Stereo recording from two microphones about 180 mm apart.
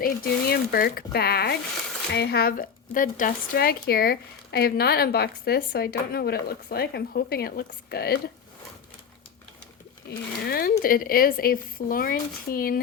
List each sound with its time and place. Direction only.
0.0 s speech: 55° left (ahead or behind)
10.1 s speech: 60° left (ahead or behind)